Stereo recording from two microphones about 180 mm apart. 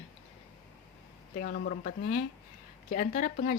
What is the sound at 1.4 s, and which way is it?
A woman's voice, 50° left (ahead or behind).